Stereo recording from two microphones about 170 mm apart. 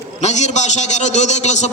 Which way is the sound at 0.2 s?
40° left (ahead or behind).